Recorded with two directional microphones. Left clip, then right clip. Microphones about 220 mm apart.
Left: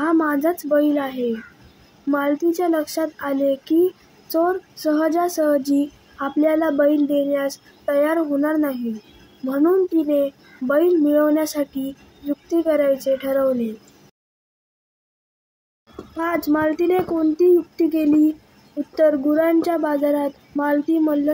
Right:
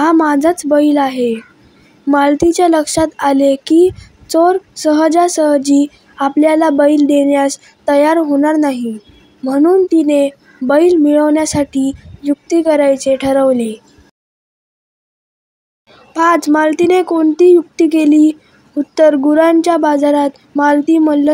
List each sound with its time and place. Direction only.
0.0 s a woman's voice: 35° right (ahead or behind)
16.2 s speech: 35° right (ahead or behind)